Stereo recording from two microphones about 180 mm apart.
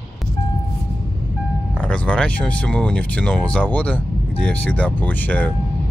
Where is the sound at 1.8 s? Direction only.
5° left (ahead or behind).